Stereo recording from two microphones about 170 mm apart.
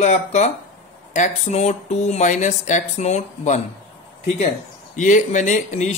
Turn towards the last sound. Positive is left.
turn(degrees=45)  # may be behind; listen again after turning